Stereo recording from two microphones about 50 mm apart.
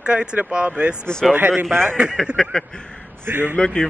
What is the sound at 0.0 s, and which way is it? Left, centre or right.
Speech, centre.